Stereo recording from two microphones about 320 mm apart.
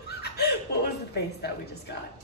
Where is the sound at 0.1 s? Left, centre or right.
Left.